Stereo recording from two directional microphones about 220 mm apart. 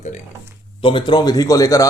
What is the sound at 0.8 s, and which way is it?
Speech, 20° left (ahead or behind).